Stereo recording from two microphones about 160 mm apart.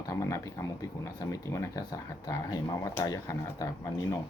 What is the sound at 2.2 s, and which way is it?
Speech, 25° left (ahead or behind).